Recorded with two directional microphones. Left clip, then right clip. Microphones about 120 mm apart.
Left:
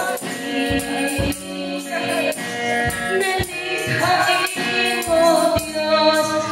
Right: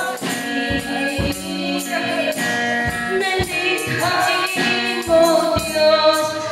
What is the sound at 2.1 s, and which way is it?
Music, 25° left (ahead or behind).